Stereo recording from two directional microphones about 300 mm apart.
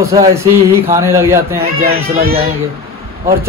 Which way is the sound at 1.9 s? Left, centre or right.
Right.